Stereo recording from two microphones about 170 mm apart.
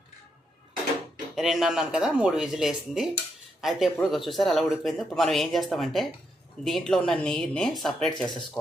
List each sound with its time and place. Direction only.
1.4 s speech: centre (ahead or behind)